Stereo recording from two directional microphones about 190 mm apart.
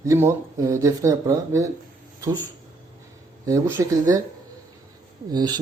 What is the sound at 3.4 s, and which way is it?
Speech, 15° right (ahead or behind).